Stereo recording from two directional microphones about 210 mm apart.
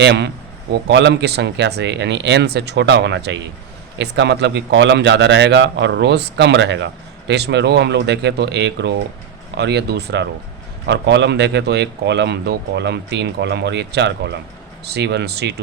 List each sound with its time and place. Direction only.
0.0 s a man's voice: 55° right (ahead or behind)